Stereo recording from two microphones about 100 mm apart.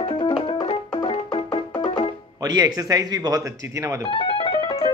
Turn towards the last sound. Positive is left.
turn(degrees=55)  # may be behind; listen again after turning